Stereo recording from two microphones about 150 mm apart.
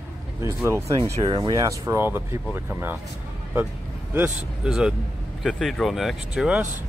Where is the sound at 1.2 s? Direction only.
35° right (ahead or behind).